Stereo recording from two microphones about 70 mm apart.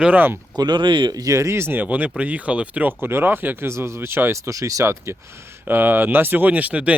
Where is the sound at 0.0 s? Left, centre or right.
Right.